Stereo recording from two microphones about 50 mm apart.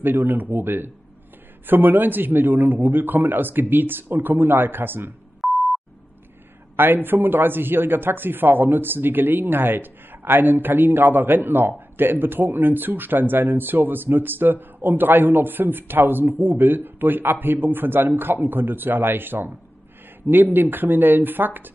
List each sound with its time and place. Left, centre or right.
0.0 s speech: right
5.4 s beep: centre
6.8 s speech: right